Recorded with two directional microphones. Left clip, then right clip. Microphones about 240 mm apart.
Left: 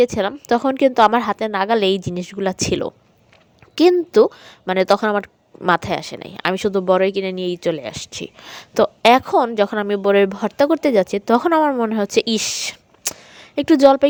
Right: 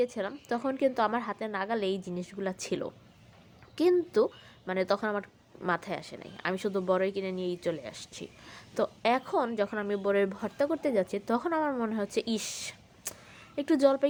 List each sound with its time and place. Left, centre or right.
0.0 s speech: left